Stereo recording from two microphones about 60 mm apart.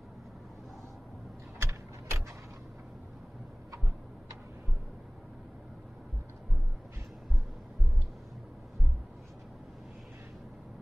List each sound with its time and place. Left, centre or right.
1.6 s gears: right